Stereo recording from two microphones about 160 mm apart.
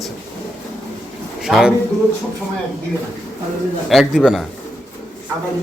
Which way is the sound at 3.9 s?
Centre (ahead or behind).